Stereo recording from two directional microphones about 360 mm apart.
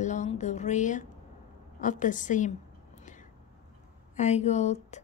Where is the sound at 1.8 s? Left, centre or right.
Left.